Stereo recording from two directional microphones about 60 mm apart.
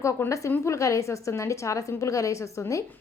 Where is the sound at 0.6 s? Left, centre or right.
Left.